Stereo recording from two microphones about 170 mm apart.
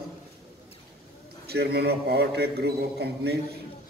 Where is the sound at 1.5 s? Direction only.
70° right (ahead or behind).